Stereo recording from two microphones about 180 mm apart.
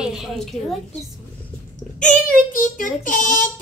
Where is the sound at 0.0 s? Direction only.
5° right (ahead or behind).